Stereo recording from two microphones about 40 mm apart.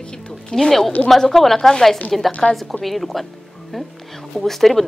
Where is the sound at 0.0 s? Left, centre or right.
Left.